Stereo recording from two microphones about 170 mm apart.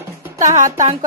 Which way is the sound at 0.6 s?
45° right (ahead or behind).